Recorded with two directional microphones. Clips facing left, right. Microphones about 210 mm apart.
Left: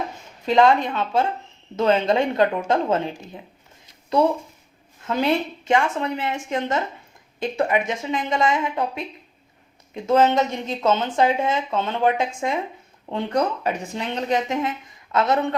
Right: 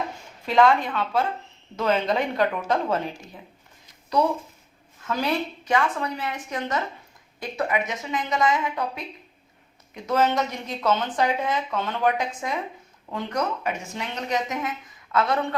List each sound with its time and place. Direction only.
0.4 s speech: 25° left (ahead or behind)
5.0 s a woman's voice: 25° left (ahead or behind)